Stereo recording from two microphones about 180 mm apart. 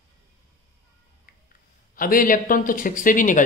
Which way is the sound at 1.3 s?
55° left (ahead or behind).